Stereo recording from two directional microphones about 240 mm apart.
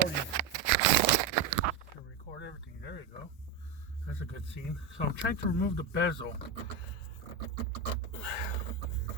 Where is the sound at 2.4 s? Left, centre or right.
Left.